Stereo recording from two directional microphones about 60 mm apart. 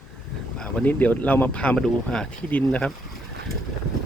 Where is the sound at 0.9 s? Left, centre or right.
Left.